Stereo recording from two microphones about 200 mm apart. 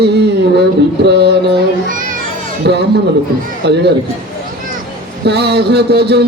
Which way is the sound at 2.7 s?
55° right (ahead or behind).